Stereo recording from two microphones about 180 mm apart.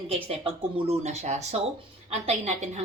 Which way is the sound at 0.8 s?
35° right (ahead or behind).